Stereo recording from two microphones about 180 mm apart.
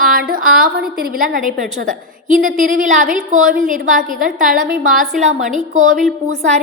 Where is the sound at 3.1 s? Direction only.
5° right (ahead or behind).